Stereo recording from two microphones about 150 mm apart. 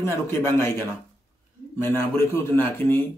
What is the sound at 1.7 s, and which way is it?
A man's voice, 15° left (ahead or behind).